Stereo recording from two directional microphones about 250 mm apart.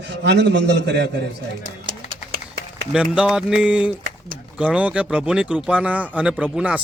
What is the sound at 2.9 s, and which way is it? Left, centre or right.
Speech, centre.